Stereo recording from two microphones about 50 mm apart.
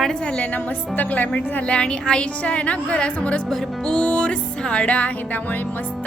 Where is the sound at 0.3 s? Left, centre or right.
Left.